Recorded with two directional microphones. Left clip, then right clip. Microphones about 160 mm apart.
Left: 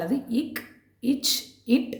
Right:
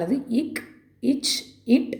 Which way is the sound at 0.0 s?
15° right (ahead or behind).